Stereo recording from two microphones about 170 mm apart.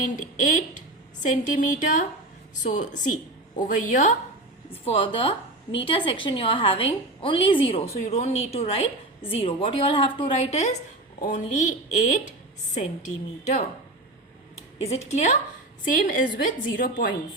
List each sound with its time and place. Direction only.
0.0 s a woman's voice: 50° left (ahead or behind)
4.7 s a woman's voice: 35° left (ahead or behind)
12.7 s a woman's voice: 45° left (ahead or behind)
14.8 s a woman's voice: 40° left (ahead or behind)